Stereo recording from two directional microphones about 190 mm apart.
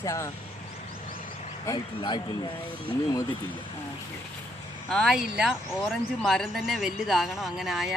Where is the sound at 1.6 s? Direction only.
25° left (ahead or behind).